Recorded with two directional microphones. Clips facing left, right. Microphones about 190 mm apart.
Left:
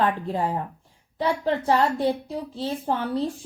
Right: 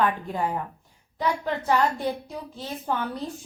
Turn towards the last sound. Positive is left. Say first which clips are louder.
# left 4 dB
turn(degrees=30)  # may be behind; listen again after turning